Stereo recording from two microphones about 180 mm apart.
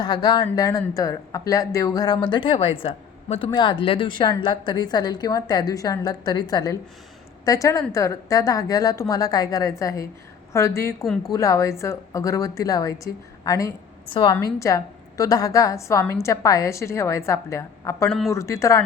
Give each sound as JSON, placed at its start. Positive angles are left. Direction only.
{"t": 0.0, "sound": "a woman's voice", "side_deg": 25}
{"t": 11.0, "sound": "speech", "side_deg": 0}
{"t": 11.3, "sound": "a woman's voice", "side_deg": 15}
{"t": 14.3, "sound": "a woman's voice", "side_deg": 15}